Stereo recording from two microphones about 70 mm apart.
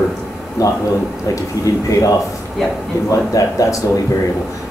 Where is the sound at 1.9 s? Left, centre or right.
Left.